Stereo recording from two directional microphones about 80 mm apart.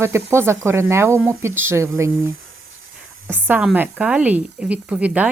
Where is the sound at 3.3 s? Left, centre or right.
Right.